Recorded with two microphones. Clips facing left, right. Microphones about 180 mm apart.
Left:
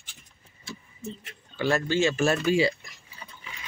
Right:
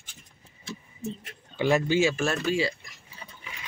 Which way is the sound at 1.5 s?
15° right (ahead or behind).